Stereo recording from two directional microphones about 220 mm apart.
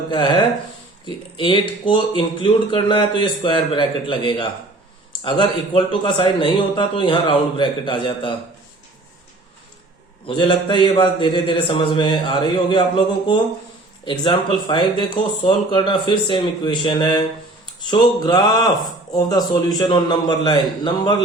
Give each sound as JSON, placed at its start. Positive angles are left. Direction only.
{"t": 0.1, "sound": "speech", "side_deg": 20}
{"t": 10.2, "sound": "speech", "side_deg": 20}
{"t": 14.0, "sound": "speech", "side_deg": 20}